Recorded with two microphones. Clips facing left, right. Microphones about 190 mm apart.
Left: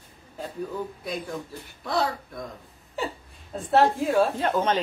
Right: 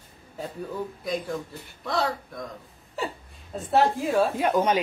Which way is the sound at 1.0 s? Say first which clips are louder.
Right 3 dB; centre (ahead or behind).